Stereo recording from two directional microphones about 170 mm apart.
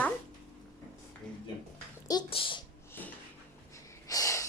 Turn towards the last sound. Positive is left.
turn(degrees=20)  # may be behind; listen again after turning